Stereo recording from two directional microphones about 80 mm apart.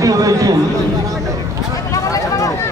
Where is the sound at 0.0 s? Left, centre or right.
Right.